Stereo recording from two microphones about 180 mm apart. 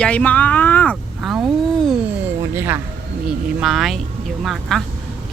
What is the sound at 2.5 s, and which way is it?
Speech, 10° right (ahead or behind).